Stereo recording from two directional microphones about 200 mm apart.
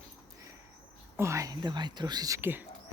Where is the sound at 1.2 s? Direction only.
15° right (ahead or behind).